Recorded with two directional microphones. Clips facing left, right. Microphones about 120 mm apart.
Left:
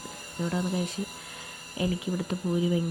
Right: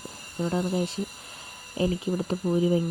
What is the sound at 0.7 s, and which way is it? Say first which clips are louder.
Speech: right 3 dB; 30° right (ahead or behind).